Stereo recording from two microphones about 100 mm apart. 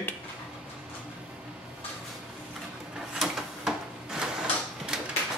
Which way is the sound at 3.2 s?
5° right (ahead or behind).